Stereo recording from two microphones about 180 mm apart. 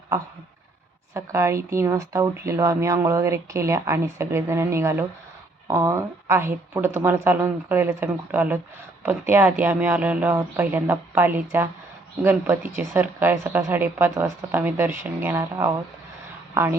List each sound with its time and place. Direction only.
1.1 s a woman's voice: 15° right (ahead or behind)